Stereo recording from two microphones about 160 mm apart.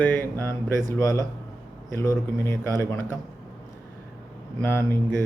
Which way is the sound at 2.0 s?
15° left (ahead or behind).